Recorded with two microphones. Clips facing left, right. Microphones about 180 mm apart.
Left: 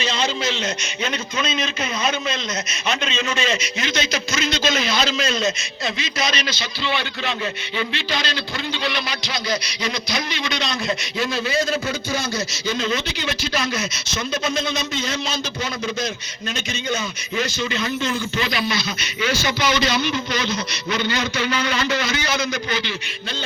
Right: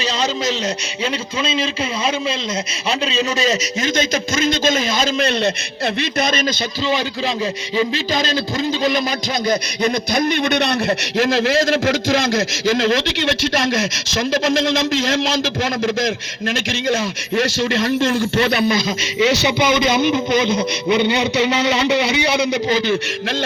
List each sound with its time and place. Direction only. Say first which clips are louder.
0.0 s a man's voice: right 3 dB; 40° right (ahead or behind)
1.4 s a man's voice: right 4 dB; 30° right (ahead or behind)
3.1 s a man's voice: right 7 dB; 35° right (ahead or behind); by 6.4 s 55° right (ahead or behind)
7.8 s a man's voice: right 7 dB; 40° right (ahead or behind)
9.5 s a man's voice: right 7 dB; 55° right (ahead or behind); by 13.1 s 90° right
19.2 s a man's voice: right 6 dB; 75° right (ahead or behind); by 21.0 s 55° right (ahead or behind)
21.1 s a man's voice: right 6 dB; 65° right (ahead or behind)
21.6 s a man's voice: right 6 dB; 80° right
21.9 s a man's voice: right 6 dB; 65° right (ahead or behind)